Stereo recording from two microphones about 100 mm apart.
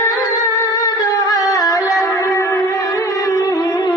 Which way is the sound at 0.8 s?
35° left (ahead or behind).